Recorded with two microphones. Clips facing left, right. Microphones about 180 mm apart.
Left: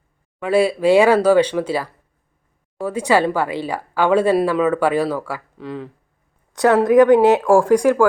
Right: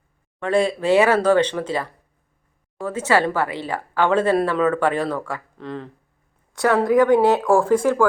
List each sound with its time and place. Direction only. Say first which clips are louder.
0.3 s a woman's voice: left 3 dB; 5° left (ahead or behind)
6.5 s a woman's voice: left 4 dB; 20° left (ahead or behind)